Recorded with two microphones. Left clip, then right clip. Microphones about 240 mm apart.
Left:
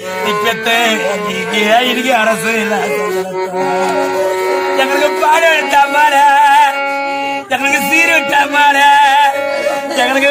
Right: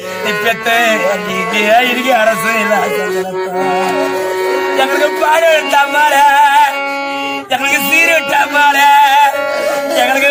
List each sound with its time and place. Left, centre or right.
0.4 s music: right
4.8 s speech: right
7.7 s music: right